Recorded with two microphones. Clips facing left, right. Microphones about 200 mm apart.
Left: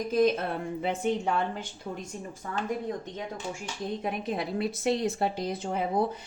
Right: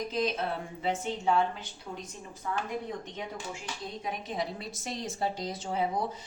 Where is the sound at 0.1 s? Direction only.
50° left (ahead or behind).